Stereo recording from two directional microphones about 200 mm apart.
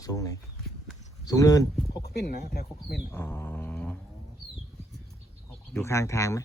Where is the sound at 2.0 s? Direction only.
55° left (ahead or behind).